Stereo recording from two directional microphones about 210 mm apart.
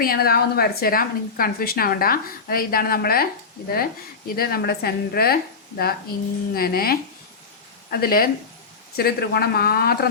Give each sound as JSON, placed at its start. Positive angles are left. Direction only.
{"t": 0.0, "sound": "a woman's voice", "side_deg": 45}